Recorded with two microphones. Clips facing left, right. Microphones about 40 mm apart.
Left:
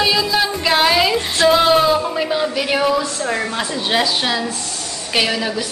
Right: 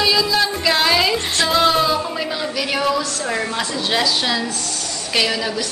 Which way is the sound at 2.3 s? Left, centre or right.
Centre.